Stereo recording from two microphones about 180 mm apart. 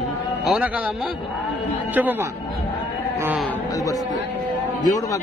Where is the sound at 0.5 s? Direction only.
5° right (ahead or behind).